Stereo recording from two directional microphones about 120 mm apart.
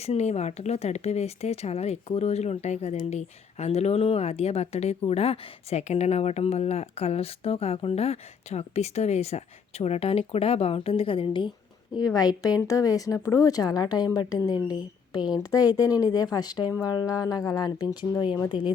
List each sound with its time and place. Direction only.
0.0 s speech: 65° left (ahead or behind); by 11.5 s 45° left (ahead or behind)
11.9 s speech: 30° left (ahead or behind)